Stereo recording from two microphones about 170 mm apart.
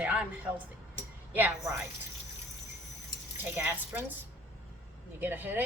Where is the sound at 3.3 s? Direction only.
10° right (ahead or behind).